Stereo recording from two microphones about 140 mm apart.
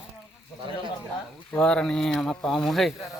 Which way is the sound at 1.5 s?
5° left (ahead or behind).